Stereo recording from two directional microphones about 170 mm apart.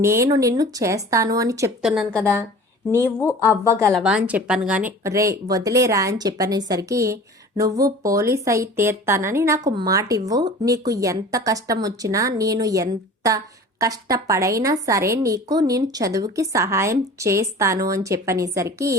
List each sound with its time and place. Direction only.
0.0 s a woman's voice: 15° right (ahead or behind)
1.8 s a woman's voice: 5° right (ahead or behind)
2.9 s speech: 15° left (ahead or behind)
3.5 s a woman's voice: 15° right (ahead or behind)
3.9 s a woman's voice: 5° right (ahead or behind)
4.9 s a woman's voice: 20° right (ahead or behind)